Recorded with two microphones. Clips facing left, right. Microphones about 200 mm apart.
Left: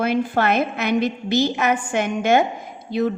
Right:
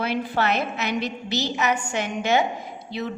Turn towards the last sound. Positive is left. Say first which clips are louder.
# left 8 dB
turn(degrees=50)  # may be behind; listen again after turning